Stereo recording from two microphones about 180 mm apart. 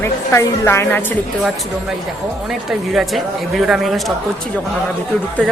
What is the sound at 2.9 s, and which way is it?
Speech, centre (ahead or behind).